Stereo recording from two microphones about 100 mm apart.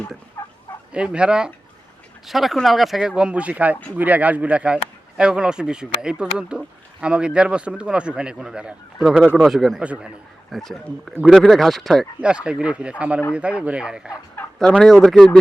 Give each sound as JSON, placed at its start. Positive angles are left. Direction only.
{"t": 0.4, "sound": "turkey", "side_deg": 25}
{"t": 0.9, "sound": "speech", "side_deg": -10}
{"t": 9.8, "sound": "speech", "side_deg": -15}
{"t": 10.5, "sound": "speech", "side_deg": 5}
{"t": 12.2, "sound": "speech", "side_deg": -10}
{"t": 14.4, "sound": "turkey", "side_deg": 20}
{"t": 14.8, "sound": "speech", "side_deg": 5}